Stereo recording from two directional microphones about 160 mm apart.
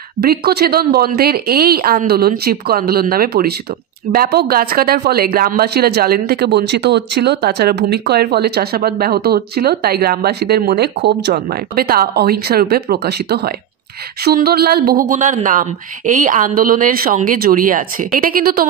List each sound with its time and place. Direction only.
0.2 s speech: 75° right (ahead or behind); by 11.3 s 90° right
11.3 s speech: 70° right (ahead or behind)